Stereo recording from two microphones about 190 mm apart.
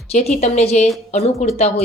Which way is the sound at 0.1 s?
35° left (ahead or behind).